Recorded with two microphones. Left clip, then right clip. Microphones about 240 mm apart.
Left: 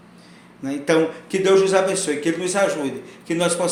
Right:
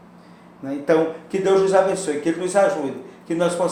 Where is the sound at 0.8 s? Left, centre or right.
Left.